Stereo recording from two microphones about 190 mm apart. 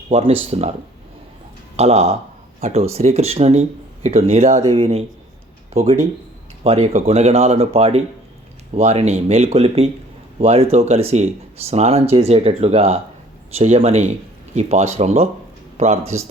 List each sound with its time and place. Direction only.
0.1 s speech: 30° right (ahead or behind)
1.7 s speech: 35° right (ahead or behind)